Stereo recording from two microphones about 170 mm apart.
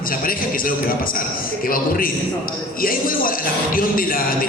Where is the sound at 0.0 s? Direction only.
55° left (ahead or behind).